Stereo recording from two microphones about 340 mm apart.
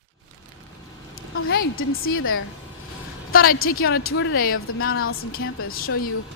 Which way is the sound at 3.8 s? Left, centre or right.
Left.